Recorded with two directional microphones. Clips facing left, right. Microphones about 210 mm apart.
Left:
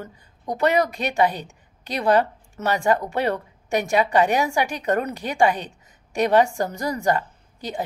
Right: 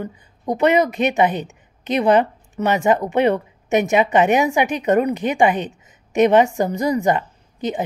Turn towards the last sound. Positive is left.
turn(degrees=-20)  # may be behind; listen again after turning